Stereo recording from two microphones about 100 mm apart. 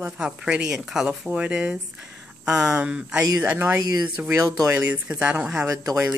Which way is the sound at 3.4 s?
20° right (ahead or behind).